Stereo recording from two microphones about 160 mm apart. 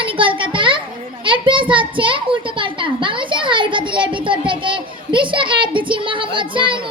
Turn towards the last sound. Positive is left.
turn(degrees=-30)  # may be behind; listen again after turning